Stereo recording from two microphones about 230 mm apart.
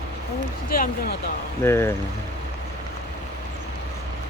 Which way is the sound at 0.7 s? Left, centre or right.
Left.